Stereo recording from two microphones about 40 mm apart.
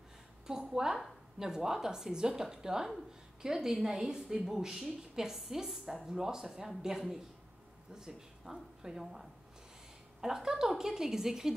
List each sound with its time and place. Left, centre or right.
0.5 s a woman's voice: centre